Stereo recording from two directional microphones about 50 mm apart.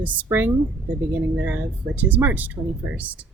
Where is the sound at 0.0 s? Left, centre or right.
Right.